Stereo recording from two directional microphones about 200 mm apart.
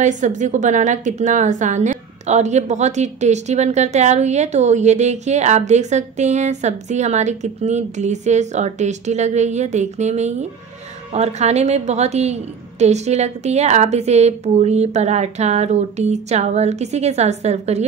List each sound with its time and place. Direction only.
0.0 s a woman's voice: 40° right (ahead or behind)